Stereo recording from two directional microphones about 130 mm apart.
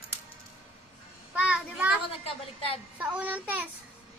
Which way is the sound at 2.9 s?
10° right (ahead or behind).